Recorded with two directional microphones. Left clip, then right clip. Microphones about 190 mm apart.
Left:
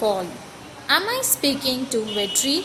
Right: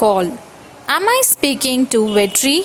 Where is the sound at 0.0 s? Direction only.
45° right (ahead or behind).